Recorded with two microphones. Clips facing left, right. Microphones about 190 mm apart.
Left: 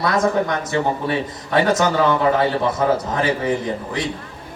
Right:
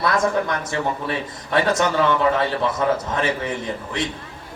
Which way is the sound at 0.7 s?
25° left (ahead or behind).